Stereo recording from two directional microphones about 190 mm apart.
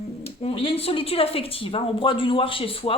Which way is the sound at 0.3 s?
30° left (ahead or behind).